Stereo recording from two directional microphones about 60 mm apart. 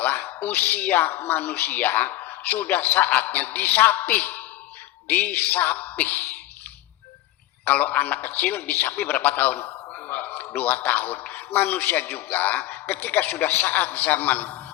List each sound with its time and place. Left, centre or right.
0.0 s a man's voice: left
7.6 s a man's voice: left